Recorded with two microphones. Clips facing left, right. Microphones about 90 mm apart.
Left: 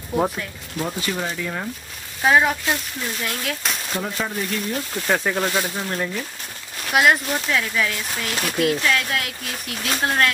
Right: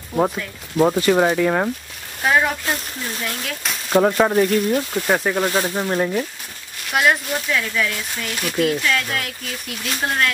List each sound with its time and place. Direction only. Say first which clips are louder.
0.1 s speech: right 2 dB; centre (ahead or behind)
0.7 s speech: right 11 dB; 50° right (ahead or behind)
2.2 s speech: left 1 dB; centre (ahead or behind)
3.9 s speech: right 14 dB; 60° right (ahead or behind)
5.0 s speech: left 1 dB; 10° right (ahead or behind)
5.5 s speech: right 4 dB; 25° right (ahead or behind)
6.9 s speech: left 1 dB; 5° left (ahead or behind)